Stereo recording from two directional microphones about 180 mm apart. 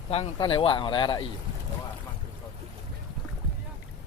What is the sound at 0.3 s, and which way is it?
Speech, 30° left (ahead or behind).